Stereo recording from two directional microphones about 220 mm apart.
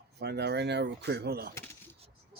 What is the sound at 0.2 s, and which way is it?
Speech, 50° right (ahead or behind).